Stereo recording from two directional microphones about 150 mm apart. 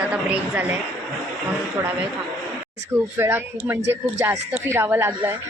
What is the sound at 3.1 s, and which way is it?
A woman's voice, 15° right (ahead or behind).